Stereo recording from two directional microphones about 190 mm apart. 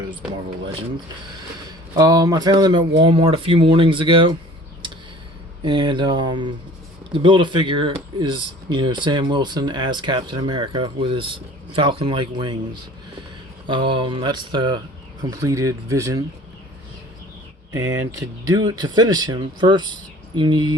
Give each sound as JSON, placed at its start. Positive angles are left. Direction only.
{"t": 2.0, "sound": "speech", "side_deg": -20}
{"t": 5.6, "sound": "speech", "side_deg": -25}
{"t": 13.7, "sound": "speech", "side_deg": -25}
{"t": 17.7, "sound": "speech", "side_deg": -15}